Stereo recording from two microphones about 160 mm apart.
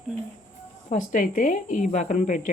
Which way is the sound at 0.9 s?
55° left (ahead or behind).